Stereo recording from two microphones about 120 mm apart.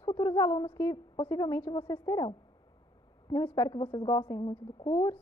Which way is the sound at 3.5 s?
30° left (ahead or behind).